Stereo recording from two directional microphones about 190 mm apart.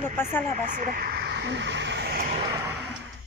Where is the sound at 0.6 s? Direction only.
45° right (ahead or behind); by 2.1 s 65° right (ahead or behind).